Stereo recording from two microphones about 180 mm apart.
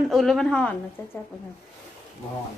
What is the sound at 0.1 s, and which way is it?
A woman's voice, centre (ahead or behind).